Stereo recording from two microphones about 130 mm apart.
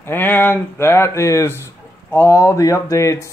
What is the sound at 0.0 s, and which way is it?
Speech, 15° left (ahead or behind).